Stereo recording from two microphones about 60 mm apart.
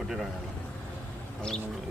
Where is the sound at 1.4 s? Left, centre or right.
Centre.